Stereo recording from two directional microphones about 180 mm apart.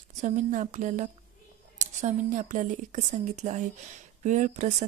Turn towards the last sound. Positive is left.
turn(degrees=-40)  # may be behind; listen again after turning